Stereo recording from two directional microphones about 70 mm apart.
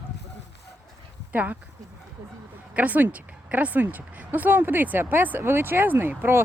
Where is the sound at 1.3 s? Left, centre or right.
Right.